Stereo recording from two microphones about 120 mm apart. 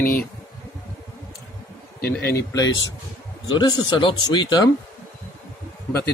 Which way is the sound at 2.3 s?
30° left (ahead or behind).